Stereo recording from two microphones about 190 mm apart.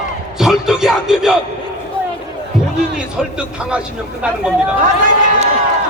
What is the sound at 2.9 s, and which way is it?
A man's voice, 5° right (ahead or behind).